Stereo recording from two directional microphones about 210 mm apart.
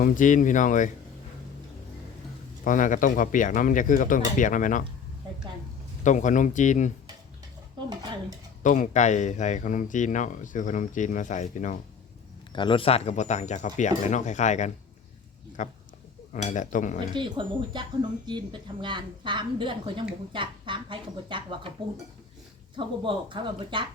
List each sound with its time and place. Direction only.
0.0 s speech: 40° left (ahead or behind)
2.6 s speech: 40° left (ahead or behind)
6.0 s speech: 35° left (ahead or behind)
8.6 s speech: 35° left (ahead or behind)
12.5 s speech: 25° left (ahead or behind)
17.2 s a woman's voice: 20° right (ahead or behind)
22.7 s a woman's voice: 25° right (ahead or behind)